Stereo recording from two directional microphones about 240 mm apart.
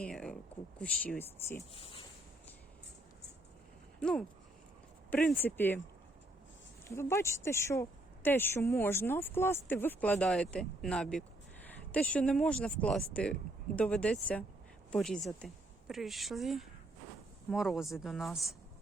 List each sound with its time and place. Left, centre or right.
0.0 s a sound: centre
0.8 s speech: centre
1.7 s speech: left
4.0 s speech: centre
6.8 s speech: centre
11.7 s a sound: centre
12.1 s speech: centre